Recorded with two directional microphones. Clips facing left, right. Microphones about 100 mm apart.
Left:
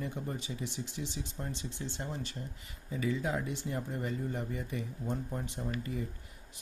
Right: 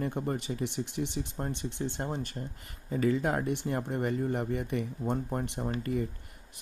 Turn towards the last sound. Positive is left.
turn(degrees=-55)  # may be behind; listen again after turning